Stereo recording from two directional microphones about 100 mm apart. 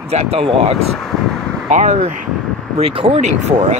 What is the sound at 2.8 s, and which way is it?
Speech, 80° right.